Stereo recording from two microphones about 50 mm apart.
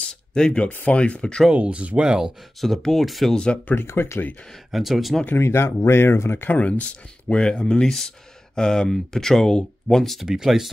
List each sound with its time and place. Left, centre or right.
0.3 s speech: centre
1.5 s speech: right
2.0 s speech: centre
2.8 s speech: centre
3.7 s speech: left
4.6 s speech: centre
5.3 s speech: left
5.6 s speech: left
6.5 s speech: left; by 10.2 s centre
10.2 s speech: centre